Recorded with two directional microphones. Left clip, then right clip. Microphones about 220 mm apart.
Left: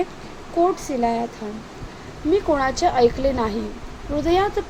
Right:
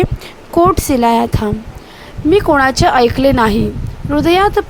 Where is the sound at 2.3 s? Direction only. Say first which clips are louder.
Right 9 dB; 45° right (ahead or behind).